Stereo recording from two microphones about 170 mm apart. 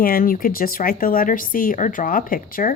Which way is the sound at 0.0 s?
55° left (ahead or behind).